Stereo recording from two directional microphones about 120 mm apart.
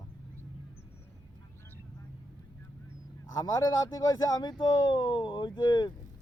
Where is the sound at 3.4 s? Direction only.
30° left (ahead or behind).